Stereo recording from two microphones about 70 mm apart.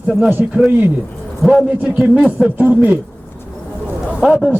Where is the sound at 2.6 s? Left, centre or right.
Right.